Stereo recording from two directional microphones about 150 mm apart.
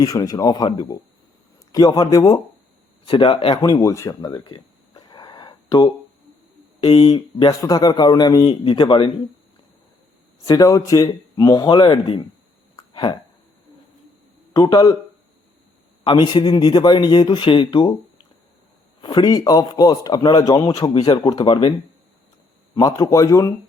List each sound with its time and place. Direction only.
0.0 s speech: 25° left (ahead or behind)
3.1 s speech: 35° left (ahead or behind)
3.7 s a sound: 20° left (ahead or behind)
6.8 s speech: 40° left (ahead or behind)
7.1 s speech: 25° left (ahead or behind)
10.4 s speech: 25° left (ahead or behind)
12.7 s hiccup: 30° left (ahead or behind)
14.5 s speech: 25° left (ahead or behind)
16.0 s speech: 30° left (ahead or behind)
19.0 s speech: 25° left (ahead or behind)
22.7 s speech: 25° left (ahead or behind)